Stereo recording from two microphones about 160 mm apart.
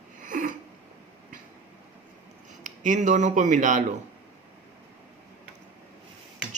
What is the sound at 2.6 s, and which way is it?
Speech, 50° right (ahead or behind).